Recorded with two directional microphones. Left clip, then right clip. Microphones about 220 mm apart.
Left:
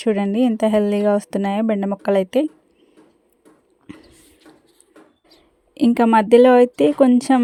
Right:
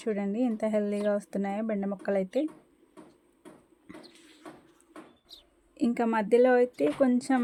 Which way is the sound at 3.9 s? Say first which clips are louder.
Left 7 dB; 30° left (ahead or behind).